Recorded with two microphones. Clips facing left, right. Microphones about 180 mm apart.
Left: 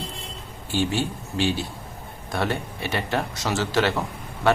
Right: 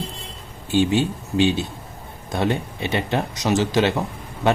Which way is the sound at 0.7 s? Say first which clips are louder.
Right 6 dB; 20° right (ahead or behind).